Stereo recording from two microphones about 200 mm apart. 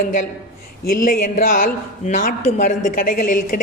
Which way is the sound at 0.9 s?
45° left (ahead or behind).